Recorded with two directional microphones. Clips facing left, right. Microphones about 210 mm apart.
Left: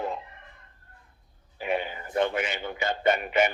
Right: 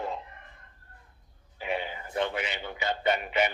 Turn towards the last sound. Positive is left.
turn(degrees=50)  # may be behind; listen again after turning